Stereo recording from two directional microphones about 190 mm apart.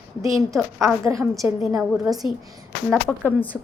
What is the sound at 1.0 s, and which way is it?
Speech, 15° right (ahead or behind).